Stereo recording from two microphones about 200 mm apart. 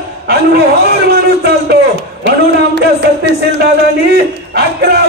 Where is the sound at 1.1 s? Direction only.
55° right (ahead or behind).